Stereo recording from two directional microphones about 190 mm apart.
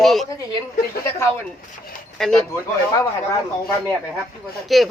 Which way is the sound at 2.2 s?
Centre (ahead or behind).